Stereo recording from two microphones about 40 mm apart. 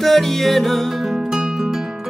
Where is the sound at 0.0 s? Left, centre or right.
Centre.